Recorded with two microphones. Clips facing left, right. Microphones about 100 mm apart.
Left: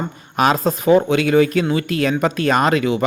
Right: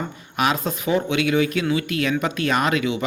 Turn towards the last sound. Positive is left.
turn(degrees=45)  # may be behind; listen again after turning